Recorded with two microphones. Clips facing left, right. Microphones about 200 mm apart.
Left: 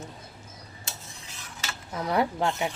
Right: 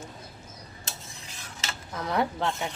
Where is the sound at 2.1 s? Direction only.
10° left (ahead or behind).